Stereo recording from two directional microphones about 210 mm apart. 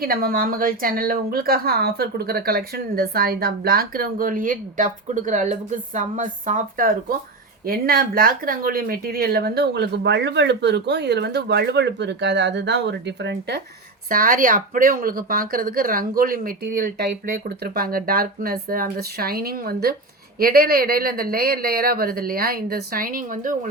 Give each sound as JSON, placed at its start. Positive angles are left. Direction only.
{"t": 0.0, "sound": "a woman's voice", "side_deg": -45}
{"t": 14.1, "sound": "a woman's voice", "side_deg": -40}